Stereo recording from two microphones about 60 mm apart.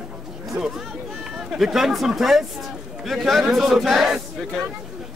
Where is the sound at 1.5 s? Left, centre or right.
Centre.